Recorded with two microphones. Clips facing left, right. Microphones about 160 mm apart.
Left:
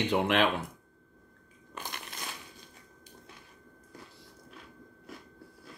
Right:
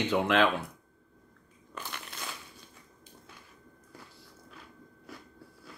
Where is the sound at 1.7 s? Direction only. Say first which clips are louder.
Even; 15° left (ahead or behind).